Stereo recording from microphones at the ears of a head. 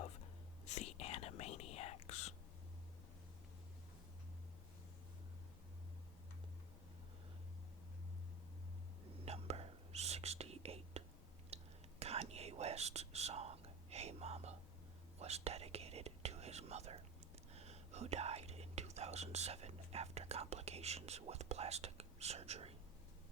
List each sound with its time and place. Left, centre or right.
0.0 s whispering: left
9.2 s whispering: right